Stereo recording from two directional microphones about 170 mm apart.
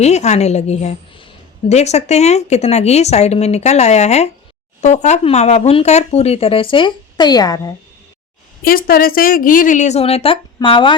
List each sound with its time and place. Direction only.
0.0 s speech: 40° left (ahead or behind); by 7.7 s 20° left (ahead or behind)
8.6 s a woman's voice: 60° left (ahead or behind); by 10.9 s 30° left (ahead or behind)